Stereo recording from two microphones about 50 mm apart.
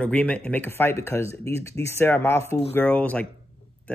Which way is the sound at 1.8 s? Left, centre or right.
Left.